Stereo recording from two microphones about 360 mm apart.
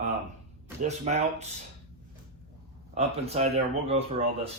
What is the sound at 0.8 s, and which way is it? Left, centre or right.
Speech, centre.